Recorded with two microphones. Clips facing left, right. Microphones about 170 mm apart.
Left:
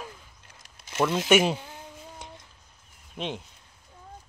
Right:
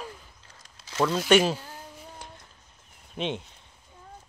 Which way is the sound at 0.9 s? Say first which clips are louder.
Right 1 dB; 20° left (ahead or behind).